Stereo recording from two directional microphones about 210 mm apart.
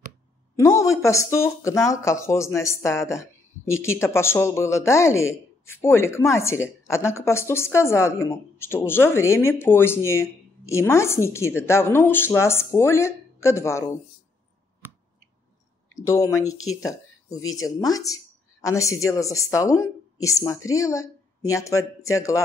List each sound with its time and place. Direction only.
0.6 s speech: 15° left (ahead or behind)
16.1 s speech: 15° left (ahead or behind)
16.4 s speech: 90° left
16.8 s speech: 15° left (ahead or behind)